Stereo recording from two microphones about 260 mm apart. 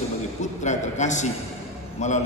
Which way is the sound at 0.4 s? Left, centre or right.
Left.